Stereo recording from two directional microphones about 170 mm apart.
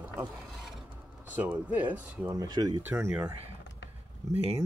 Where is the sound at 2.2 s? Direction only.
20° right (ahead or behind).